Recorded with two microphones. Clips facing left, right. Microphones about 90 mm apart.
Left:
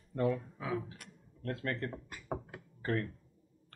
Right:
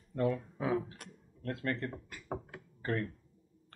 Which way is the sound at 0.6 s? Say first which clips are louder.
Right 4 dB; 35° right (ahead or behind).